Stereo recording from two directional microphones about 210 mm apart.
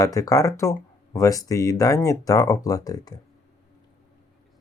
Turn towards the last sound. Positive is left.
turn(degrees=15)  # may be behind; listen again after turning